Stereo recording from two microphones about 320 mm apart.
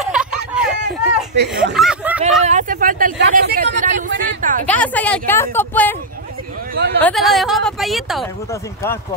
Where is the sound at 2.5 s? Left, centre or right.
Right.